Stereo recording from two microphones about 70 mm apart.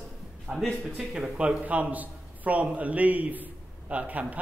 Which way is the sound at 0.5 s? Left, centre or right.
Centre.